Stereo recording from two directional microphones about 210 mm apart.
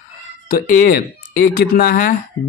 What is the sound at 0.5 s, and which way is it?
Speech, 45° left (ahead or behind).